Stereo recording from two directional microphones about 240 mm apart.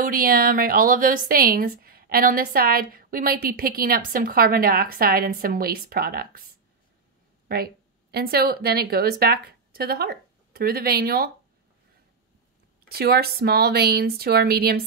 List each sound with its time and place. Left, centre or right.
0.0 s a woman's voice: right
12.8 s a woman's voice: right